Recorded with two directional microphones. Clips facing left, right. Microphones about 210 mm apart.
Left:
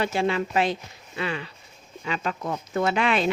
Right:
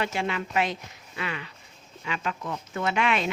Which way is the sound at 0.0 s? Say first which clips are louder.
Left 5 dB; 35° left (ahead or behind).